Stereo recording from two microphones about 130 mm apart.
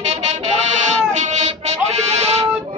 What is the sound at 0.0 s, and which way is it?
Goat, 60° right (ahead or behind).